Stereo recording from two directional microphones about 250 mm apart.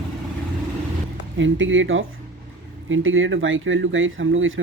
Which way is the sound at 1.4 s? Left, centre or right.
Right.